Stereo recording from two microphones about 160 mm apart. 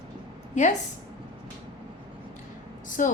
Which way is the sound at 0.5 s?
50° left (ahead or behind).